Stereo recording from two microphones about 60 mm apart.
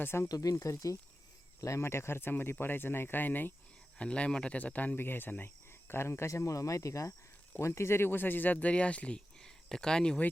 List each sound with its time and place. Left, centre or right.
0.0 s speech: left
0.3 s speech: left
1.6 s speech: left
3.9 s speech: centre; by 5.5 s left
5.9 s speech: left
6.3 s speech: left
7.7 s speech: left
8.5 s speech: centre